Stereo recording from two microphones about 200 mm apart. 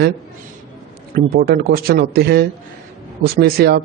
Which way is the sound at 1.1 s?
50° right (ahead or behind).